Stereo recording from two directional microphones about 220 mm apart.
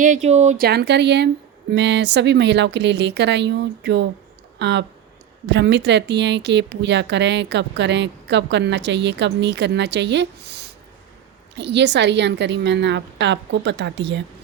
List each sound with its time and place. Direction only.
0.0 s speech: 30° right (ahead or behind); by 14.3 s 55° right (ahead or behind)